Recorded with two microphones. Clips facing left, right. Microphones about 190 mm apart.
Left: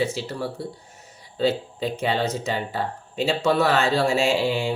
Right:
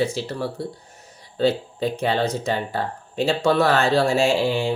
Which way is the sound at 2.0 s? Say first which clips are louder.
Right 1 dB; 5° left (ahead or behind).